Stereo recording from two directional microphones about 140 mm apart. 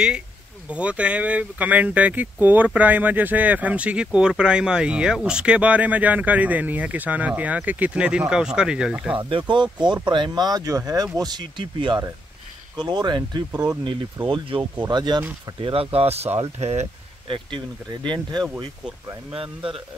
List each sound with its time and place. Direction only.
0.7 s speech: 10° right (ahead or behind)
9.4 s speech: 35° right (ahead or behind)
13.5 s speech: 10° right (ahead or behind)
14.2 s speech: 35° right (ahead or behind)
15.6 s speech: 40° right (ahead or behind)
17.3 s speech: 35° right (ahead or behind)